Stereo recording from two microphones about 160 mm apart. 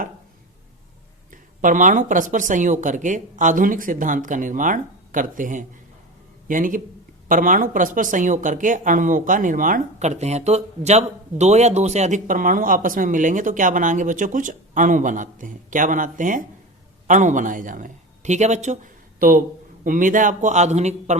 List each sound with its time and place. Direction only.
1.3 s a man's voice: 55° right (ahead or behind)